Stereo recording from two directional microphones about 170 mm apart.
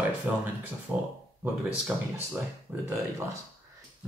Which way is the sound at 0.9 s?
5° right (ahead or behind).